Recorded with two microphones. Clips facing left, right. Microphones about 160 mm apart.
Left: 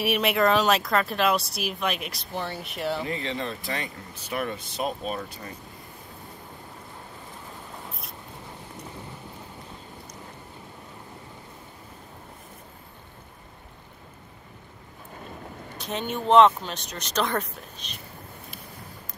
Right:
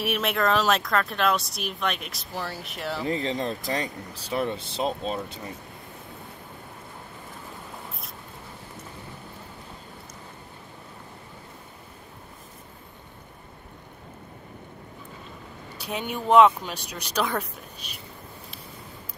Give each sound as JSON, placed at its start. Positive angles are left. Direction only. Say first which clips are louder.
{"t": 0.0, "sound": "speech", "louder": "left 3 dB", "side_deg": 0}
{"t": 3.1, "sound": "speech", "louder": "right 4 dB", "side_deg": -35}
{"t": 4.3, "sound": "speech", "louder": "right 3 dB", "side_deg": -25}
{"t": 15.8, "sound": "speech", "louder": "left 1 dB", "side_deg": -10}